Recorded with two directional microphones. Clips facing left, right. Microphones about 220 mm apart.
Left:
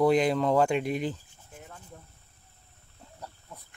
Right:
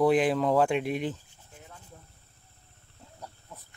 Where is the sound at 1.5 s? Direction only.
50° left (ahead or behind).